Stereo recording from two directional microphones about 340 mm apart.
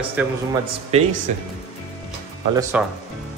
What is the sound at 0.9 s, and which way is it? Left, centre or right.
Speech, centre.